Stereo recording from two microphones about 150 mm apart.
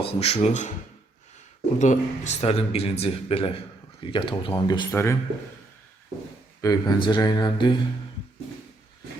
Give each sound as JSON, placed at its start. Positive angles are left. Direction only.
{"t": 0.0, "sound": "speech", "side_deg": 45}
{"t": 1.8, "sound": "speech", "side_deg": 50}
{"t": 4.9, "sound": "speech", "side_deg": 15}
{"t": 6.6, "sound": "speech", "side_deg": 25}